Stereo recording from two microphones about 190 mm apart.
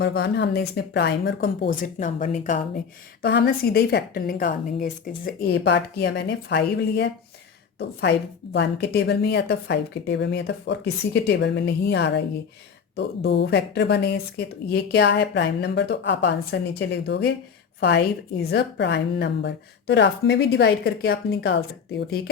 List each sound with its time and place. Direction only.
0.0 s a woman's voice: 60° left (ahead or behind)
1.7 s a woman's voice: 45° left (ahead or behind); by 7.1 s 65° left (ahead or behind)
8.5 s a woman's voice: 65° left (ahead or behind)